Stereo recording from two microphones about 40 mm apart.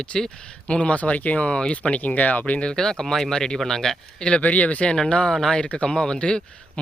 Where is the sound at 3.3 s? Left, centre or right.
Centre.